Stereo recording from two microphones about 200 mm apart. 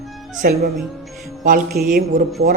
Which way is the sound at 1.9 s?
45° right (ahead or behind).